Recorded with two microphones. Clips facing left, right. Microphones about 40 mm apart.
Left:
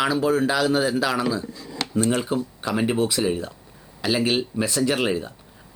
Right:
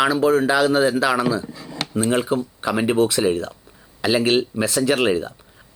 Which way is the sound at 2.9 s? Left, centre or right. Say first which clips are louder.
Right 4 dB; centre.